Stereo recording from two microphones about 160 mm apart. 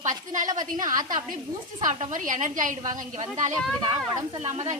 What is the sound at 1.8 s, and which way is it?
A woman's voice, 50° right (ahead or behind).